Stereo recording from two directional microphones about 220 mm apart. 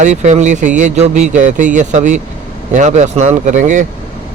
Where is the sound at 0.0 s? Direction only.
35° right (ahead or behind).